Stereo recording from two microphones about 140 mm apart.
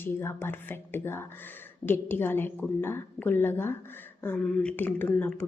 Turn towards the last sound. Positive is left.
turn(degrees=10)  # may be behind; listen again after turning